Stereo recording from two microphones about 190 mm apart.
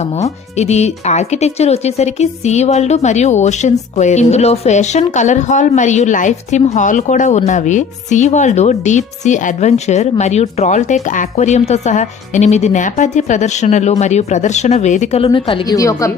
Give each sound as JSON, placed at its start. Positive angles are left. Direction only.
{"t": 0.2, "sound": "speech", "side_deg": 35}
{"t": 15.8, "sound": "a woman's voice", "side_deg": 15}